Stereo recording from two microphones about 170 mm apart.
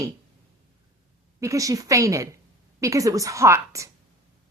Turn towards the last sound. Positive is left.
turn(degrees=-15)  # may be behind; listen again after turning